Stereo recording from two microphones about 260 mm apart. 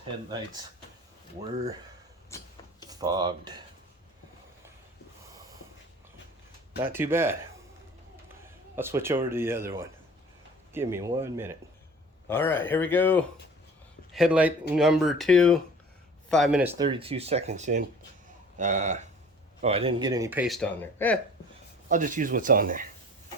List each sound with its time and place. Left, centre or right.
2.9 s speech: centre
6.8 s speech: centre
8.7 s speech: centre
12.3 s speech: centre
14.1 s speech: centre
21.8 s speech: right